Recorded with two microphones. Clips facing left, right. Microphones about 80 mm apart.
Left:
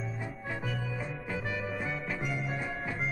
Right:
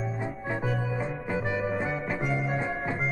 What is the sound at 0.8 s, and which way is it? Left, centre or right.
Music, right.